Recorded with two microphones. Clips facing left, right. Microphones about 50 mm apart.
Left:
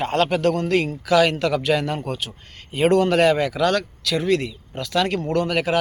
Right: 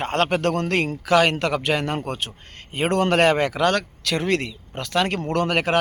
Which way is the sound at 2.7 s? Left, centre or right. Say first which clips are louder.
Left 5 dB; right.